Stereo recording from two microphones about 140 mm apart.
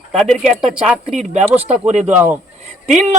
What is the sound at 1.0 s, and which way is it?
Speech, 55° right (ahead or behind).